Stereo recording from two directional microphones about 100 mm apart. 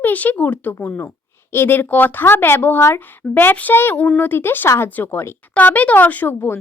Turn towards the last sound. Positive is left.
turn(degrees=20)  # may be behind; listen again after turning